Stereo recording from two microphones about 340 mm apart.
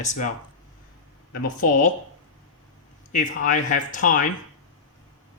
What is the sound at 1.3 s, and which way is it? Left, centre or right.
Speech, left.